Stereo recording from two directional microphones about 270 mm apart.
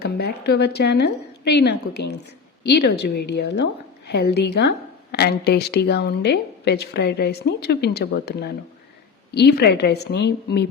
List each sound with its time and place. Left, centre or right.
0.0 s a woman's voice: left